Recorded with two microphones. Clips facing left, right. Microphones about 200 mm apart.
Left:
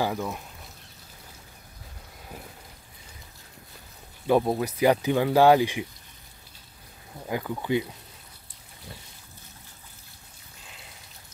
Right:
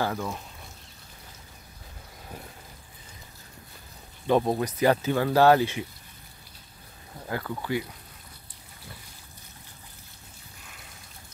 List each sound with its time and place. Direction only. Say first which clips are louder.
0.0 s speech: left 1 dB; 5° left (ahead or behind)
4.3 s speech: left 1 dB; 5° left (ahead or behind)
7.2 s speech: left 3 dB; 15° left (ahead or behind)